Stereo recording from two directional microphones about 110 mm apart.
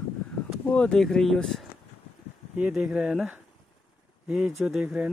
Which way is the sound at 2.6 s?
10° right (ahead or behind).